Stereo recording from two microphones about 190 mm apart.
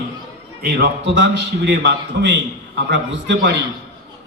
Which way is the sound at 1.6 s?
65° right (ahead or behind).